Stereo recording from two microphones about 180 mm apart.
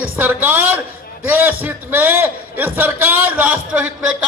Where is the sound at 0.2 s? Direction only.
10° right (ahead or behind).